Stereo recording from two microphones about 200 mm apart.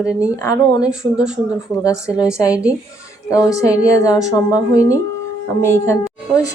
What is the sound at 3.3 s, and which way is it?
Speech, 15° left (ahead or behind).